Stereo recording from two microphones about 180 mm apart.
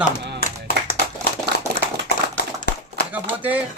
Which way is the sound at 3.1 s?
10° right (ahead or behind).